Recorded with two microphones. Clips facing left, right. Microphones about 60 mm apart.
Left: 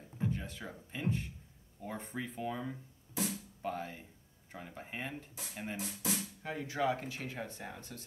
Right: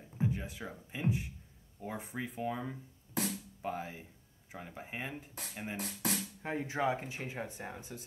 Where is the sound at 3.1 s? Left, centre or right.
Right.